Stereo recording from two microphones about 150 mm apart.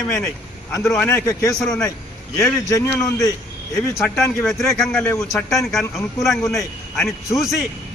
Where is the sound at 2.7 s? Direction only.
20° left (ahead or behind).